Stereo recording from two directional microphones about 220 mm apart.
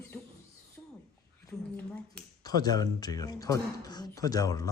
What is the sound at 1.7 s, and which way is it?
Speech, 15° left (ahead or behind).